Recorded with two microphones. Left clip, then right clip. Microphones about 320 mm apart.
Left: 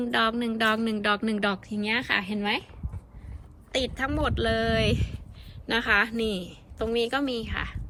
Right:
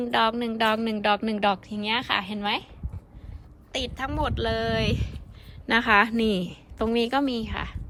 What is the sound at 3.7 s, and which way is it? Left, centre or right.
Speech, centre.